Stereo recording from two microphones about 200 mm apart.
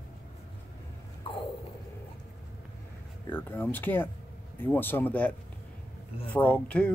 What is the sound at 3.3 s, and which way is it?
Speech, 10° left (ahead or behind).